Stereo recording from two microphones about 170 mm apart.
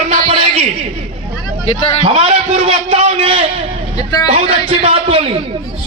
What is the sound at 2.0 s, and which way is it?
A man's voice, 35° right (ahead or behind).